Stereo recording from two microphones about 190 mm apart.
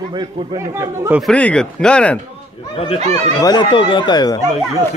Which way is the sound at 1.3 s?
5° left (ahead or behind).